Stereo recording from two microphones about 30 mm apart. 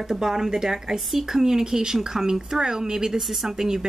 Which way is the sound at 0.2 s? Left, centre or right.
Centre.